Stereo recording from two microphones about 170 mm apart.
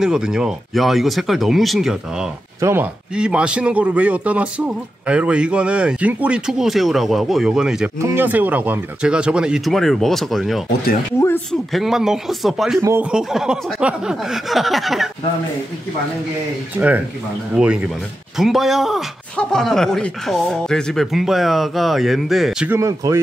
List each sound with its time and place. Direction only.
0.0 s speech: 5° right (ahead or behind)
11.1 s speech: 15° left (ahead or behind)
11.7 s speech: centre (ahead or behind)
16.7 s speech: 10° right (ahead or behind)
22.8 s speech: 20° right (ahead or behind)